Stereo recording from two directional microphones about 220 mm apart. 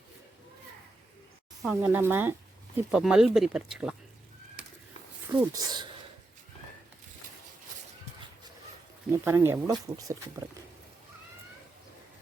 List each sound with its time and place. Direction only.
1.6 s speech: 10° right (ahead or behind)
5.3 s speech: 15° right (ahead or behind)
9.2 s speech: 10° right (ahead or behind)